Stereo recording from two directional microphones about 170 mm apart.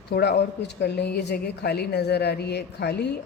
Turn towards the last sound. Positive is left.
turn(degrees=75)  # may be behind; listen again after turning